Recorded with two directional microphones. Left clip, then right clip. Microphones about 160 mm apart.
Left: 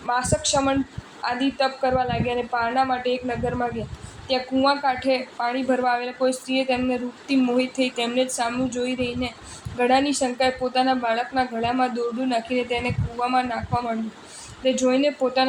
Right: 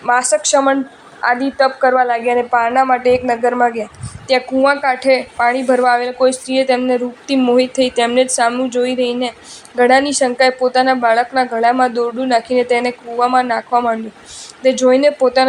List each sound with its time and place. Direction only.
0.0 s a woman's voice: 35° right (ahead or behind)